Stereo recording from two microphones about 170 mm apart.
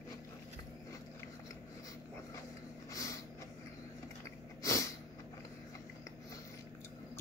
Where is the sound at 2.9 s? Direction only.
20° left (ahead or behind).